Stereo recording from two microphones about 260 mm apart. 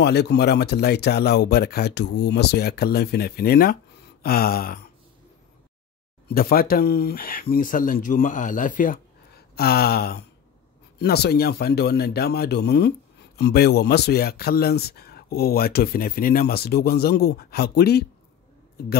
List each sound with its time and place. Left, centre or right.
0.0 s speech: left
6.2 s speech: left